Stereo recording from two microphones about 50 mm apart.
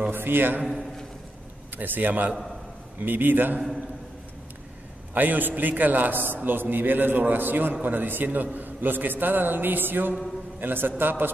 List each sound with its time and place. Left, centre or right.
0.1 s a man's voice: right
0.7 s a sound: centre
1.8 s a man's voice: right
5.1 s a man's voice: right